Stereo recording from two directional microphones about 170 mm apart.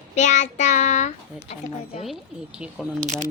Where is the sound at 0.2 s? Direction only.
45° left (ahead or behind).